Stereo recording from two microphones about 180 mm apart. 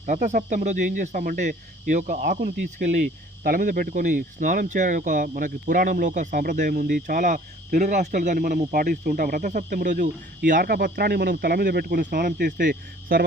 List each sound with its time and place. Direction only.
0.0 s speech: 45° right (ahead or behind)